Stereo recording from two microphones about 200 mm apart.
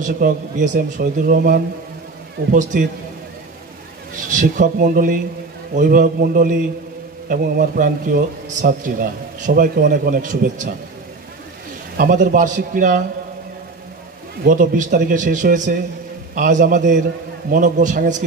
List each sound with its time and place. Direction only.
0.0 s a man's voice: 40° right (ahead or behind)
4.1 s a man's voice: 40° right (ahead or behind)
12.0 s a man's voice: 45° right (ahead or behind)
14.4 s a man's voice: 45° right (ahead or behind)